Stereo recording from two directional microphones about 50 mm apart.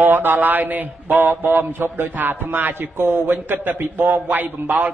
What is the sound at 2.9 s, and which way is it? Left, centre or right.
A man's voice, right.